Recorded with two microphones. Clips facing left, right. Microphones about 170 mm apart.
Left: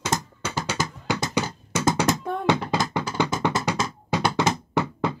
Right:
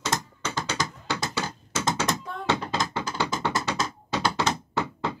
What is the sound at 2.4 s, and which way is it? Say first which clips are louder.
Music: left 4 dB; 15° left (ahead or behind).